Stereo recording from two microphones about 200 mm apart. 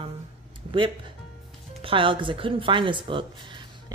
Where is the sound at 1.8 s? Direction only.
25° right (ahead or behind).